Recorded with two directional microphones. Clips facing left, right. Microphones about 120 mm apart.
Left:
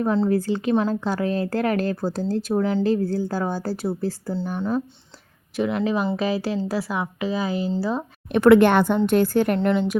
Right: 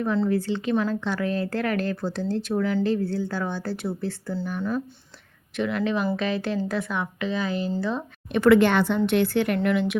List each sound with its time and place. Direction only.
0.0 s speech: 35° left (ahead or behind)
8.3 s a woman's voice: 55° left (ahead or behind)
9.6 s speech: 30° left (ahead or behind)